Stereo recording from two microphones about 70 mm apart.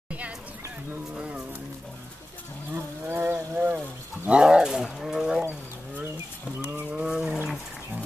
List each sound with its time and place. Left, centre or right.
1.1 s speech: centre
2.7 s livestock: right
3.7 s wild animals: right
4.3 s roaring cats: centre
6.6 s a sound: right
6.9 s a sound: centre